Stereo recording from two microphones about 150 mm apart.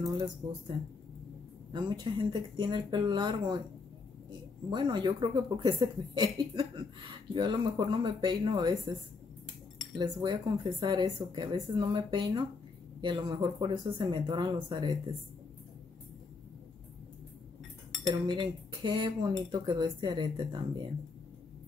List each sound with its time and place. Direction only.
1.7 s speech: 30° right (ahead or behind)
4.6 s speech: 30° right (ahead or behind)
9.9 s speech: 30° right (ahead or behind)
18.2 s speech: 30° right (ahead or behind)